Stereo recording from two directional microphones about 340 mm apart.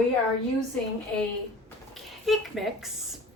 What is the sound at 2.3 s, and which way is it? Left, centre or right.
Speech, centre.